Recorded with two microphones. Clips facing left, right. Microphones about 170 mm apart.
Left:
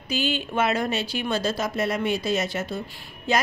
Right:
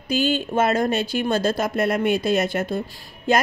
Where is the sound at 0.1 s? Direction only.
45° right (ahead or behind).